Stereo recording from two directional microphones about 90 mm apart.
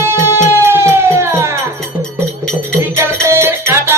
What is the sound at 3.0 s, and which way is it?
Music, 30° right (ahead or behind).